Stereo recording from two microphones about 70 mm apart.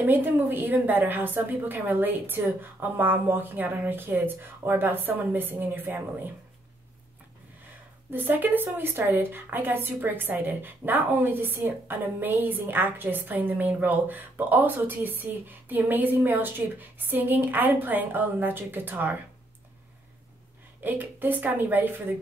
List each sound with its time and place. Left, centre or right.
0.0 s a woman's voice: right
8.1 s a woman's voice: right
20.8 s a woman's voice: right